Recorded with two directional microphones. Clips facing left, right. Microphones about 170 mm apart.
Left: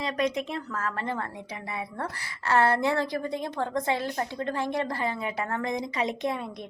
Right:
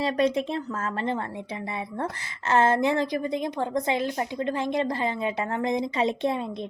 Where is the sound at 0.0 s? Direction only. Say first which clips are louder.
Right 4 dB; 30° right (ahead or behind).